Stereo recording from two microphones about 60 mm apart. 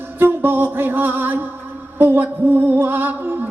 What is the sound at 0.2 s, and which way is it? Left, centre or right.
Music, right.